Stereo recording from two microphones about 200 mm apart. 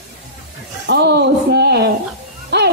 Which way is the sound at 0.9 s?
55° right (ahead or behind).